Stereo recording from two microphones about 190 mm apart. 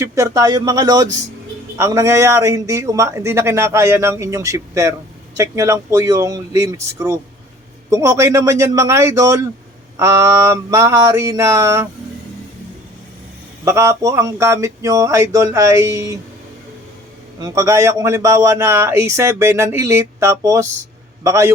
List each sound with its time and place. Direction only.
0.0 s a man's voice: 15° right (ahead or behind)
13.7 s a man's voice: 15° right (ahead or behind)
17.4 s a man's voice: 15° right (ahead or behind)